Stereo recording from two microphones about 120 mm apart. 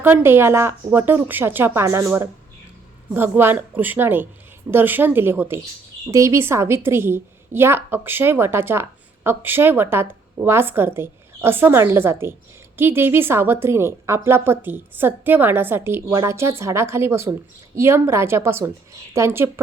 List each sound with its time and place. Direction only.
0.0 s a woman's voice: 20° right (ahead or behind)
3.1 s a woman's voice: 15° right (ahead or behind)